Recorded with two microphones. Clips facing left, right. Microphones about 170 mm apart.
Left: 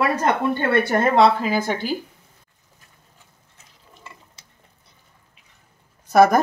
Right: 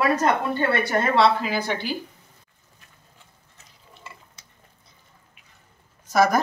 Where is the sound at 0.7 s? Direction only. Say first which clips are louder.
Left 5 dB; 50° left (ahead or behind).